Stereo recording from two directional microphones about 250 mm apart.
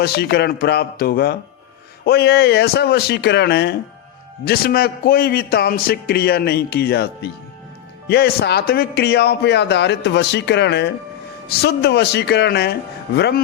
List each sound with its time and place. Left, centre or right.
0.0 s a man's voice: left